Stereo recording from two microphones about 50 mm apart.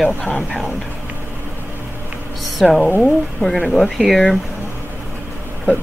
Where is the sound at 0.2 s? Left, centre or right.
Left.